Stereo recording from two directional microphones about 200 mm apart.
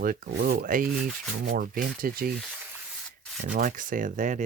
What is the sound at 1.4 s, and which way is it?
Speech, 45° right (ahead or behind).